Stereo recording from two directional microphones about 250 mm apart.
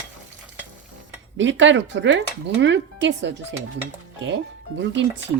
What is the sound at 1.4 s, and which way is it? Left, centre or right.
Speech, right.